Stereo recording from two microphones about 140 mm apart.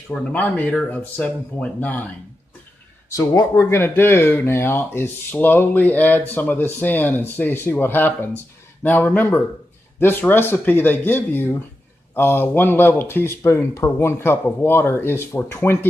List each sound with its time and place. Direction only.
0.1 s speech: 10° left (ahead or behind)
3.1 s speech: 25° left (ahead or behind)